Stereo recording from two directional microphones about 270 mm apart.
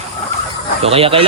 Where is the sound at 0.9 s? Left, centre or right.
Right.